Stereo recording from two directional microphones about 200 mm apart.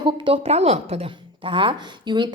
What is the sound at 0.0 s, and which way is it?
A woman's voice, 25° right (ahead or behind).